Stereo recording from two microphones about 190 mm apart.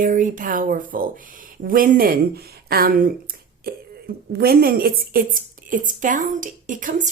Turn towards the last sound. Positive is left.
turn(degrees=-45)  # may be behind; listen again after turning